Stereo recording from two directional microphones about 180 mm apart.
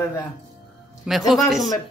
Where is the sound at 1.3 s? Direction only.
Centre (ahead or behind).